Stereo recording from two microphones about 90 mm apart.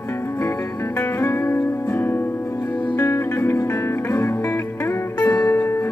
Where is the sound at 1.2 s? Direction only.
25° left (ahead or behind).